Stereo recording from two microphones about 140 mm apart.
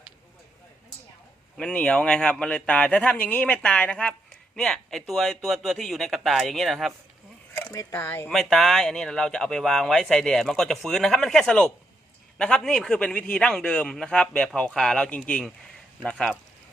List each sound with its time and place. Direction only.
1.5 s speech: 5° left (ahead or behind)
7.5 s speech: 25° left (ahead or behind)
8.3 s speech: centre (ahead or behind)